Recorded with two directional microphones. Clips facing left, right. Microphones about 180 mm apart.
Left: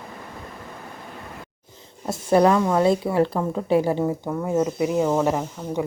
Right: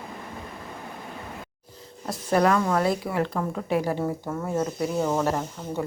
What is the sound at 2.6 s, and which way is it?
Speech, 20° left (ahead or behind).